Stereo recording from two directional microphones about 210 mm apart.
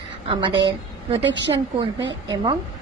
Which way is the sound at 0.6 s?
20° right (ahead or behind).